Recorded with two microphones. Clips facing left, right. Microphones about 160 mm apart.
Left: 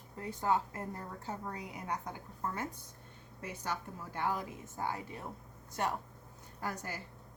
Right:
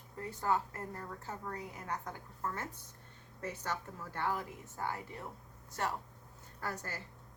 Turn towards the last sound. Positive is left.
turn(degrees=15)  # may be behind; listen again after turning